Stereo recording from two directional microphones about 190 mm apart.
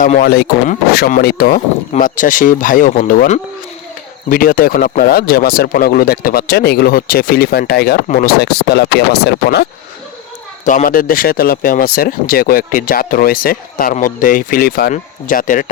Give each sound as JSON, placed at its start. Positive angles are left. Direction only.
{"t": 0.0, "sound": "speech", "side_deg": 45}
{"t": 10.7, "sound": "speech", "side_deg": 45}